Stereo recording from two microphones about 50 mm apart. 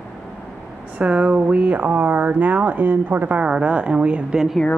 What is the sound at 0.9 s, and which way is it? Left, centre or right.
Speech, right.